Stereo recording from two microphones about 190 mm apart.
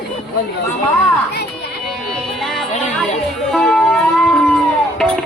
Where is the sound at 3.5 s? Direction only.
5° left (ahead or behind).